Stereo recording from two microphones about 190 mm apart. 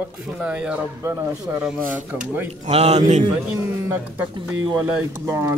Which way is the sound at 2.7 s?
35° right (ahead or behind).